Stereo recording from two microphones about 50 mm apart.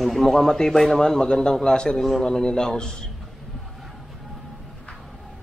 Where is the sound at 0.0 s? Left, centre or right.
Centre.